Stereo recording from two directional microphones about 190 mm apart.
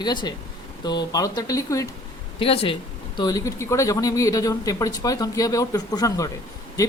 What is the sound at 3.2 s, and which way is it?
Speech, 20° left (ahead or behind).